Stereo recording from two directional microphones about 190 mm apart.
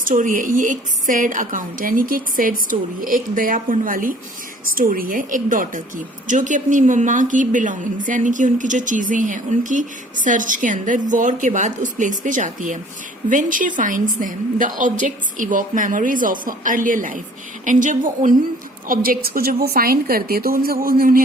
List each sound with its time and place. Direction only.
0.1 s a woman's voice: 45° right (ahead or behind)